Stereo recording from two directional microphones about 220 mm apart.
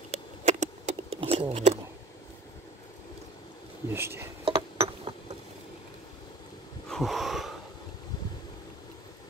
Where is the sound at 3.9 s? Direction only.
10° right (ahead or behind).